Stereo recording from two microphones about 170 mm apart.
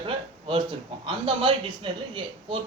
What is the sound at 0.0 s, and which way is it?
A man's voice, 30° right (ahead or behind).